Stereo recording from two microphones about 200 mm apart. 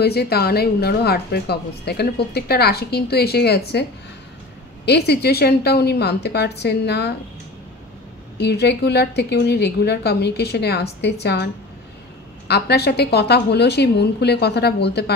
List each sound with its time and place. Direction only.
0.0 s a woman's voice: 50° left (ahead or behind)
4.8 s a woman's voice: 55° left (ahead or behind)
8.4 s a woman's voice: 55° left (ahead or behind)